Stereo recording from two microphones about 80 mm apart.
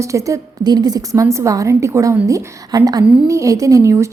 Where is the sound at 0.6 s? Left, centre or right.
Right.